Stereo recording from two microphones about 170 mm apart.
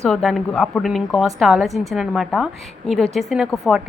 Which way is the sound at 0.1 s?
Centre (ahead or behind).